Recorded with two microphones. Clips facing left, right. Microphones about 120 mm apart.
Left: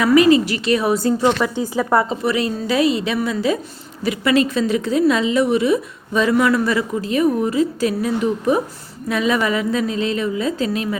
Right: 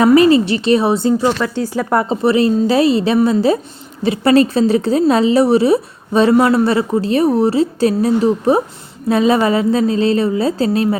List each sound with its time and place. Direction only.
0.0 s a woman's voice: 30° right (ahead or behind)
1.4 s speech: 10° left (ahead or behind)
2.0 s a woman's voice: 30° right (ahead or behind)